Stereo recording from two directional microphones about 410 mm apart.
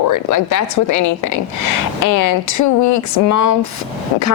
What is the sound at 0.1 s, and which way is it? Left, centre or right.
A woman's voice, left.